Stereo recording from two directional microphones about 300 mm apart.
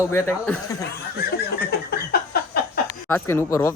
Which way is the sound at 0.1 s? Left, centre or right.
Centre.